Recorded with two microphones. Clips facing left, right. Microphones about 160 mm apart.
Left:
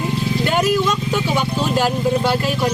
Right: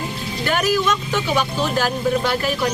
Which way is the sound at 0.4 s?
20° left (ahead or behind).